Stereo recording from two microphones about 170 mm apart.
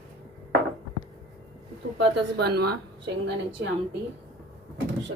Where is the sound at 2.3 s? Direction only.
70° right (ahead or behind).